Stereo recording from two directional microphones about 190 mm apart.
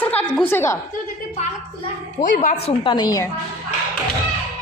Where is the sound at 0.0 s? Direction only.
5° left (ahead or behind).